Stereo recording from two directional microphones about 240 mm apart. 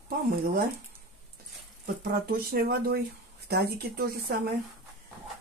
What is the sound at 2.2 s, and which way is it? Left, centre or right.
Speech, right.